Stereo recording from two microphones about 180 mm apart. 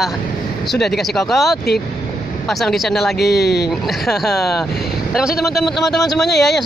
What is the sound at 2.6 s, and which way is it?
Speech, centre (ahead or behind).